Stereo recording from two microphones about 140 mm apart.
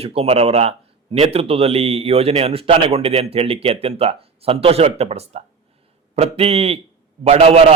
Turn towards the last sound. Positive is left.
turn(degrees=-45)  # may be behind; listen again after turning